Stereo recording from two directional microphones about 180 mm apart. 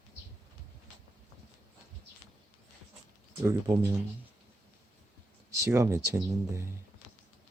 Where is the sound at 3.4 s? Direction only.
20° right (ahead or behind).